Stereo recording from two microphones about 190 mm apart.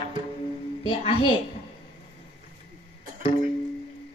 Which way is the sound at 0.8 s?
25° left (ahead or behind).